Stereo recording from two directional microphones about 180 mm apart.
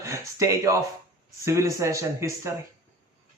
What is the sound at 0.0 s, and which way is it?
A man's voice, 15° right (ahead or behind).